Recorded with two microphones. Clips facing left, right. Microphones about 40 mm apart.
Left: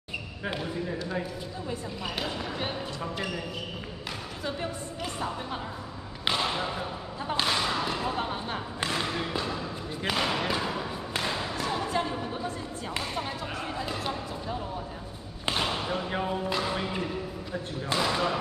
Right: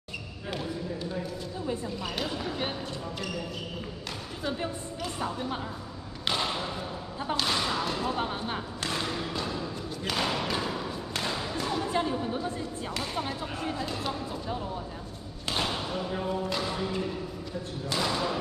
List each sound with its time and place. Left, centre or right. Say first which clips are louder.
2.1 s speech: left 1 dB; centre
6.2 s speech: left 2 dB; centre
7.4 s basketball bounce: left 2 dB; centre
13.6 s a sound: right 1 dB; centre
15.5 s a sound: left 1 dB; centre
16.4 s music: left 1 dB; centre
17.9 s thump: left 2 dB; centre